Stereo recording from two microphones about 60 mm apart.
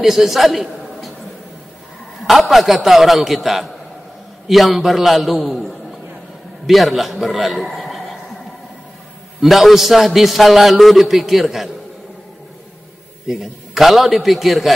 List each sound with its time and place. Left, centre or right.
0.0 s a man's voice: centre
2.2 s a man's voice: centre
9.4 s a man's voice: centre
13.3 s a man's voice: centre